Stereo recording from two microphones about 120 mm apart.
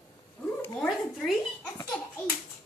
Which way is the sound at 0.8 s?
Centre (ahead or behind).